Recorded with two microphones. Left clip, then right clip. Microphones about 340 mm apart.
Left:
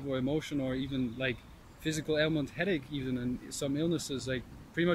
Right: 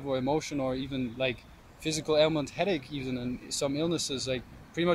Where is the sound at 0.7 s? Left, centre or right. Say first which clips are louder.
Right 3 dB; centre.